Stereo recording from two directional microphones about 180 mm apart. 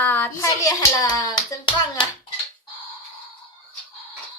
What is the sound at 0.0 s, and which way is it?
A child's voice, 10° left (ahead or behind).